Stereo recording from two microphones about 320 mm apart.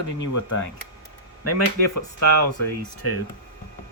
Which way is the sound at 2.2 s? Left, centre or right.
Left.